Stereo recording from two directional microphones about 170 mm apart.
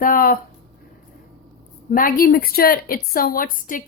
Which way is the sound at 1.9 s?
55° left (ahead or behind).